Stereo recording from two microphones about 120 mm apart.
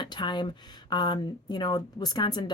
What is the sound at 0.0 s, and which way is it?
Speech, 40° left (ahead or behind).